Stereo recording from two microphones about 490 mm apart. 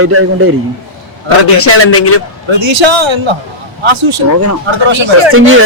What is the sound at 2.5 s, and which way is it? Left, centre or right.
A man's voice, right.